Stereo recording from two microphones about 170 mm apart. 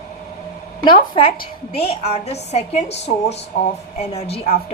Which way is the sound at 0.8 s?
30° left (ahead or behind).